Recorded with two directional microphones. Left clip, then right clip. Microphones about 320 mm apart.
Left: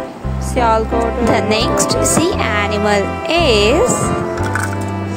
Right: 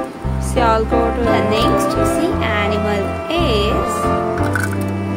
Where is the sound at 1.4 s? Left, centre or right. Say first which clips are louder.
Left 1 dB; left.